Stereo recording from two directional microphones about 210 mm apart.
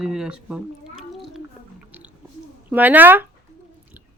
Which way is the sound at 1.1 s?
Centre (ahead or behind).